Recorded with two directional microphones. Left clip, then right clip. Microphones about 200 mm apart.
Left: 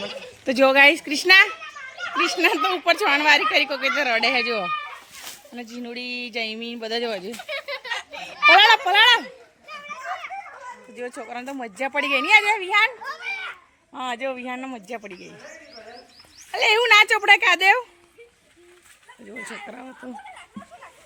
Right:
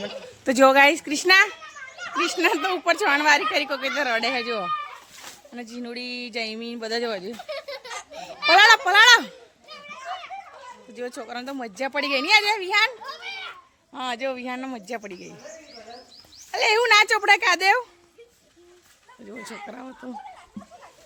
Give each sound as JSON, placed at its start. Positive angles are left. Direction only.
{"t": 0.4, "sound": "speech", "side_deg": -10}
{"t": 7.9, "sound": "a sound", "side_deg": -50}
{"t": 8.4, "sound": "speech", "side_deg": 0}
{"t": 9.8, "sound": "children playing", "side_deg": 5}
{"t": 11.2, "sound": "a woman's voice", "side_deg": -10}
{"t": 16.5, "sound": "speech", "side_deg": 0}
{"t": 19.3, "sound": "speech", "side_deg": 0}